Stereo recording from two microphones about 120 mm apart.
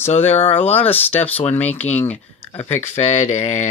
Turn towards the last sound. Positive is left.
turn(degrees=80)